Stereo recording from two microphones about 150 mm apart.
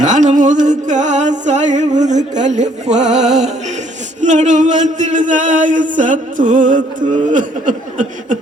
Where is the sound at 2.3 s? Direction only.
55° right (ahead or behind).